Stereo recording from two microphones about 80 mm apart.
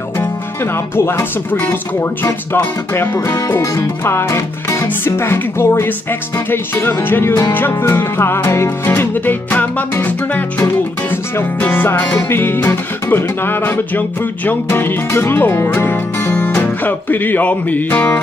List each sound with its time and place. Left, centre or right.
0.9 s music: left
3.1 s speech: left
3.6 s music: left
4.0 s speech: left
4.8 s music: left
16.3 s music: centre